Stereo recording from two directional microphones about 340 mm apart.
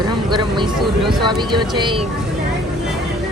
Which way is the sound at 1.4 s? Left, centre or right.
Centre.